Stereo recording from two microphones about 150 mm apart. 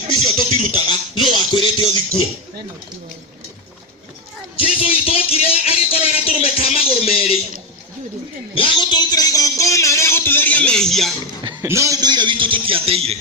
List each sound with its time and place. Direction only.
0.1 s music: 30° left (ahead or behind)
1.2 s music: centre (ahead or behind)
1.5 s music: 35° left (ahead or behind)
4.5 s music: 40° left (ahead or behind)
8.5 s music: 30° left (ahead or behind); by 11.1 s centre (ahead or behind)
11.6 s a sound: 20° right (ahead or behind); by 13.1 s 40° right (ahead or behind)